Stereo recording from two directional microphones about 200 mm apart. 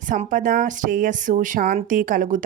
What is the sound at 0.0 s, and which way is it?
Speech, 40° right (ahead or behind).